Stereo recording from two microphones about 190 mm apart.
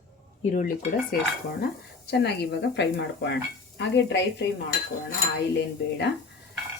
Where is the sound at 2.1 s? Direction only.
60° left (ahead or behind).